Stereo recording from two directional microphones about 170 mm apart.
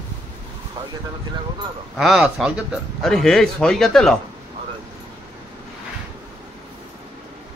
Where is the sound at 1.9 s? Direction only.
Centre (ahead or behind).